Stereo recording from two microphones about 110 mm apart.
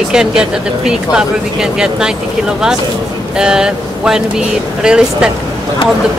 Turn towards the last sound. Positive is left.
turn(degrees=-5)  # may be behind; listen again after turning